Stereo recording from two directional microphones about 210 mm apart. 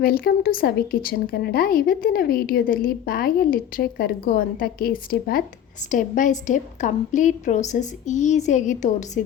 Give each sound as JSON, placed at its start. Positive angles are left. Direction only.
{"t": 0.0, "sound": "a woman's voice", "side_deg": 45}